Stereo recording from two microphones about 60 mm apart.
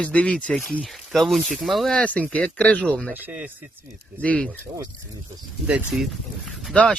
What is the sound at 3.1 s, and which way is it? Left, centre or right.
Speech, right.